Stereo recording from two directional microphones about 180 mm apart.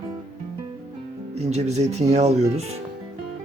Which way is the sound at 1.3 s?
35° right (ahead or behind).